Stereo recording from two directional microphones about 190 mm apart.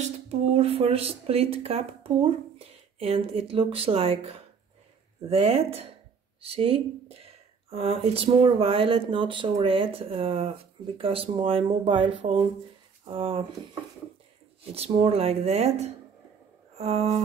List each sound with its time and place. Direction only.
0.0 s speech: 30° right (ahead or behind)
14.6 s speech: 30° right (ahead or behind)
16.7 s a sound: 35° right (ahead or behind)